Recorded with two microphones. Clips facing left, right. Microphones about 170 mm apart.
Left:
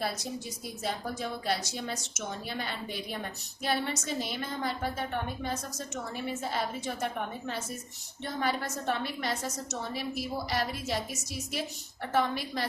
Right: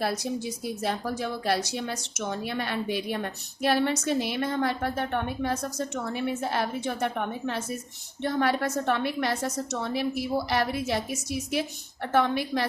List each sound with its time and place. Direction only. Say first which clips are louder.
0.0 s a woman's voice: right 6 dB; 65° right (ahead or behind)